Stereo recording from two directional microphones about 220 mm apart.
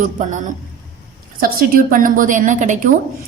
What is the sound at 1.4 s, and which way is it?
A woman's voice, 40° right (ahead or behind).